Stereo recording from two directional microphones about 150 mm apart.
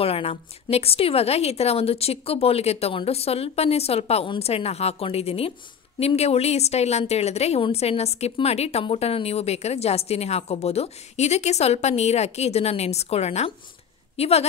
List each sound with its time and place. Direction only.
0.0 s a woman's voice: 40° left (ahead or behind)